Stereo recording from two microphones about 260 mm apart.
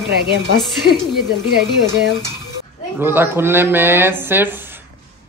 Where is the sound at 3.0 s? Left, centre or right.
Centre.